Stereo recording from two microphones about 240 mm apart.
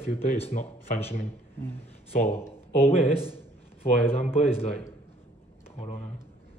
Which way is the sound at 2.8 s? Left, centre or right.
Left.